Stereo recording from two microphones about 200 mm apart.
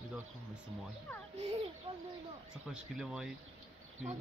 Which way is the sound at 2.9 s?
Centre (ahead or behind).